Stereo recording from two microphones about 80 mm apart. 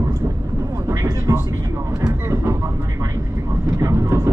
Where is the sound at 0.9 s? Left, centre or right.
Right.